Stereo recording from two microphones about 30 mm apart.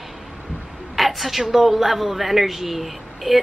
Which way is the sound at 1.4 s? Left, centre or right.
Centre.